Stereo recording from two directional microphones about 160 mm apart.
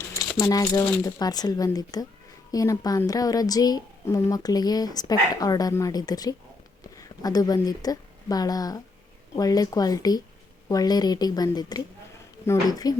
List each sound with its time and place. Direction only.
0.3 s a woman's voice: 20° left (ahead or behind)